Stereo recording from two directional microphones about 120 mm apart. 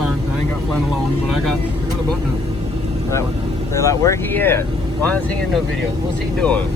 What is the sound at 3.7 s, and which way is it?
Speech, 25° left (ahead or behind).